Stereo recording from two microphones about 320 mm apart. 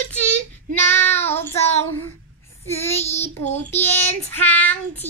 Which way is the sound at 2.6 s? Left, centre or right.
Centre.